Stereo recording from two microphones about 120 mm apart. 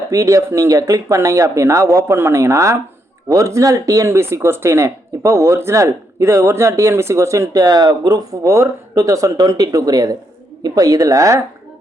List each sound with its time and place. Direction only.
0.1 s speech: 25° right (ahead or behind)